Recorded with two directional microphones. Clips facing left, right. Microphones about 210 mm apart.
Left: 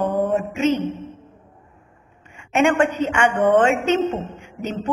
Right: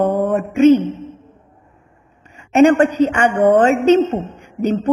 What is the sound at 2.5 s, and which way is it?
A woman's voice, 40° right (ahead or behind).